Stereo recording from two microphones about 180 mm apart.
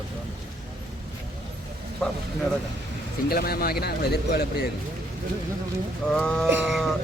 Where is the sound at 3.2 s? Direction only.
60° left (ahead or behind).